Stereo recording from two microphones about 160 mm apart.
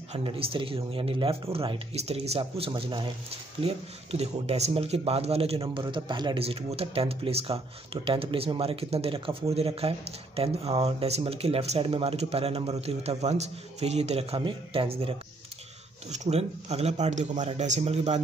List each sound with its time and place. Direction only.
0.1 s speech: 35° right (ahead or behind)